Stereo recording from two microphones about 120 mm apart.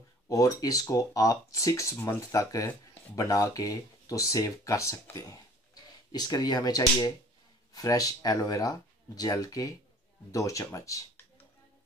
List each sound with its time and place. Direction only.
0.3 s speech: 30° left (ahead or behind)